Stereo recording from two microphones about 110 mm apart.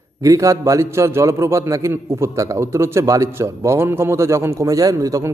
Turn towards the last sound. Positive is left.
turn(degrees=-30)  # may be behind; listen again after turning